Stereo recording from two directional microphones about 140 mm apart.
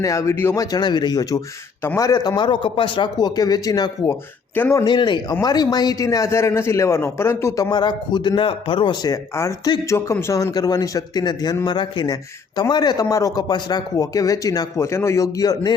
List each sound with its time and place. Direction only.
0.0 s speech: 20° left (ahead or behind)
4.9 s a man's voice: 35° left (ahead or behind)